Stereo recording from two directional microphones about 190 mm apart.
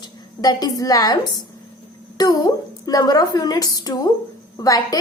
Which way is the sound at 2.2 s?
20° left (ahead or behind).